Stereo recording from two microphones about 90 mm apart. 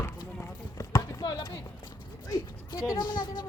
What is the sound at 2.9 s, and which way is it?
Speech, 55° left (ahead or behind).